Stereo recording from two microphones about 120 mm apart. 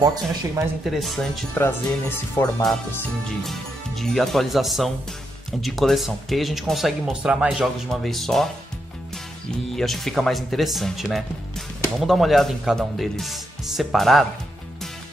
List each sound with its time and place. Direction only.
0.0 s speech: 30° right (ahead or behind)
0.8 s speech: centre (ahead or behind)
1.5 s speech: 20° left (ahead or behind)
3.3 s speech: centre (ahead or behind)
9.8 s speech: centre (ahead or behind)